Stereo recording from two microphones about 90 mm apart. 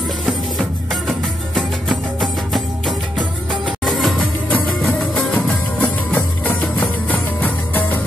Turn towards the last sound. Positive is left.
turn(degrees=20)  # may be behind; listen again after turning